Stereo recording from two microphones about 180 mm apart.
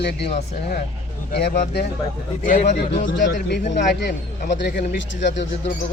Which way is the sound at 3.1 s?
75° left (ahead or behind).